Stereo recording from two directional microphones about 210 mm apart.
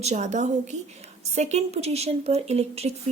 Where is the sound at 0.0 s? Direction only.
30° right (ahead or behind).